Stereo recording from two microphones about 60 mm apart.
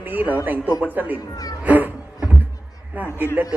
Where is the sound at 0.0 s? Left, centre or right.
Right.